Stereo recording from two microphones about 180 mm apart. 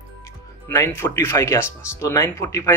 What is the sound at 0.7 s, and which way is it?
A man's voice, 15° left (ahead or behind).